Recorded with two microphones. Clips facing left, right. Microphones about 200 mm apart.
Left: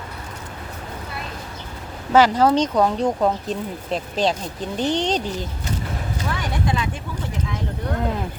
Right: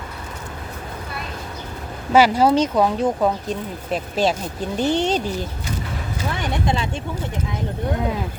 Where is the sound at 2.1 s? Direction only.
10° right (ahead or behind).